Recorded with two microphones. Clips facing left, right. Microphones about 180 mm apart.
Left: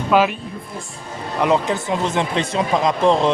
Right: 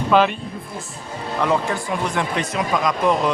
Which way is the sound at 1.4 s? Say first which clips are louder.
Left 3 dB; 20° left (ahead or behind).